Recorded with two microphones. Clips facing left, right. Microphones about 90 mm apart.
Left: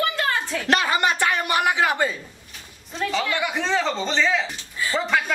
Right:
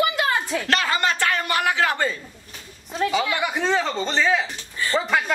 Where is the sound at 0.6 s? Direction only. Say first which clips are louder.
Left 3 dB; 20° left (ahead or behind).